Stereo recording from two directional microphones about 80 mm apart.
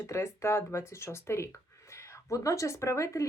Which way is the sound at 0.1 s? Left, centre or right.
Left.